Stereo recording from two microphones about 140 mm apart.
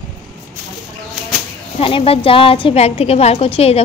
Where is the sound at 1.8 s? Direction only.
40° left (ahead or behind).